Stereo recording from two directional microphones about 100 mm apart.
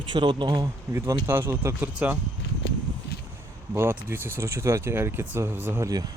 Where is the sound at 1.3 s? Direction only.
25° right (ahead or behind).